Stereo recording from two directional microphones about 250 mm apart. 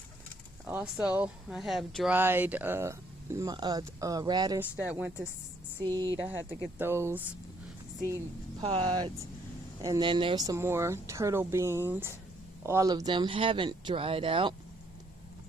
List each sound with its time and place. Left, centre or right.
0.7 s speech: centre
8.6 s speech: centre